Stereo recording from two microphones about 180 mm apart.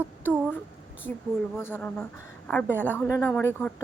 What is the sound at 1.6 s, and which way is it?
A woman's voice, 10° left (ahead or behind).